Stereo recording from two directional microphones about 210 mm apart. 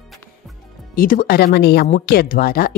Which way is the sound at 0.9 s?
40° left (ahead or behind).